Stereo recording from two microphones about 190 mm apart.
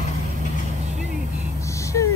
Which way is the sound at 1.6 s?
15° left (ahead or behind).